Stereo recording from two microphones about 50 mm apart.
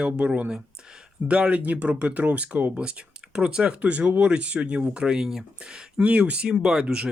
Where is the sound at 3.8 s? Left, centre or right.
Right.